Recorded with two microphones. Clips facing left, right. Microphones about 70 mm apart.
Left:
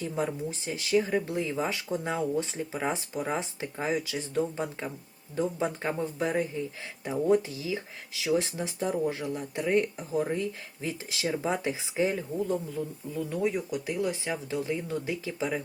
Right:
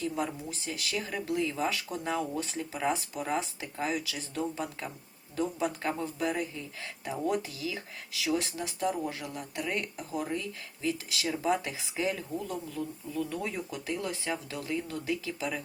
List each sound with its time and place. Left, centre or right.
0.0 s speech: left